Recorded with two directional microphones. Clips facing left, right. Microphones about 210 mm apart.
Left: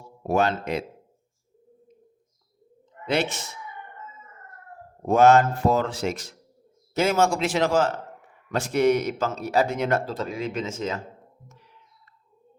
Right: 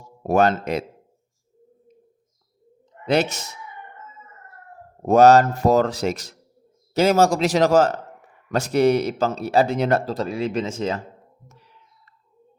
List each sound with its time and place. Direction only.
0.2 s speech: 45° right (ahead or behind)
3.1 s speech: 40° right (ahead or behind)
5.0 s speech: 40° right (ahead or behind)